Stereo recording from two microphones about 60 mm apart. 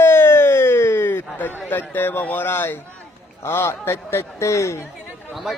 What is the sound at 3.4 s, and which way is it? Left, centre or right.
A man's voice, left.